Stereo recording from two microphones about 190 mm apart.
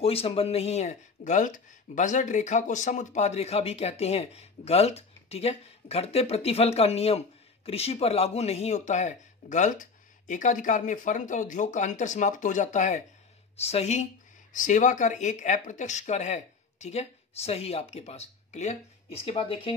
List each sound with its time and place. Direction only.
0.0 s speech: 30° left (ahead or behind)